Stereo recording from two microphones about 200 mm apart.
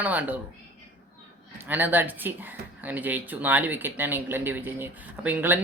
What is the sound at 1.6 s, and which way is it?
Speech, 10° right (ahead or behind).